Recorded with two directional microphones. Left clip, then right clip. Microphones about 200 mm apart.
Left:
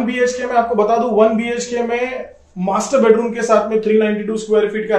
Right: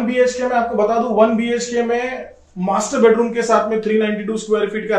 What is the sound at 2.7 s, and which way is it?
Speech, 25° left (ahead or behind).